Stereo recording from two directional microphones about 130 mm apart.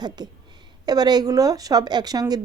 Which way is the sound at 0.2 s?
30° right (ahead or behind).